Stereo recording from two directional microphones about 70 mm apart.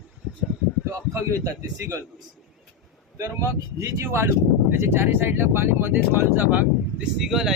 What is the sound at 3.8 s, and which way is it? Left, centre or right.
Speech, right.